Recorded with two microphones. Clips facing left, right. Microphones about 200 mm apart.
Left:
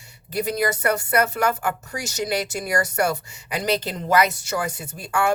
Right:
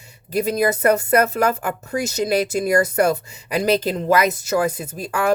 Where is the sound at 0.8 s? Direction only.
35° right (ahead or behind).